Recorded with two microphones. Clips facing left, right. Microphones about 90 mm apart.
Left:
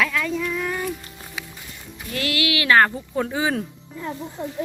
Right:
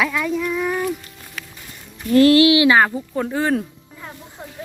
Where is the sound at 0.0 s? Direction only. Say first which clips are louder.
Right 2 dB; 15° right (ahead or behind).